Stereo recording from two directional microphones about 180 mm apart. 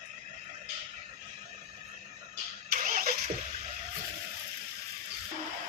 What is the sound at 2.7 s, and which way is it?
Vehicle, 50° right (ahead or behind).